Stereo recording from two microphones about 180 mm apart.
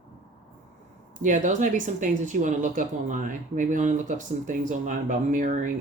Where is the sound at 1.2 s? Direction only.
45° right (ahead or behind).